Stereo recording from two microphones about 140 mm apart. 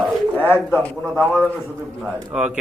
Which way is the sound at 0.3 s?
15° left (ahead or behind).